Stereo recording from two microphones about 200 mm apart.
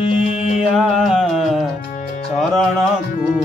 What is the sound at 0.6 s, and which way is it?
Music, 5° right (ahead or behind).